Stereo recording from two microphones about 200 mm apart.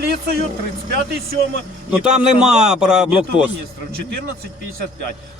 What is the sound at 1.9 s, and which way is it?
A man's voice, 5° right (ahead or behind).